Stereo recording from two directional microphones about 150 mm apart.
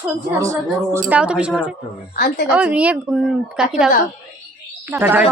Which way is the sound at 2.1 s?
70° left (ahead or behind).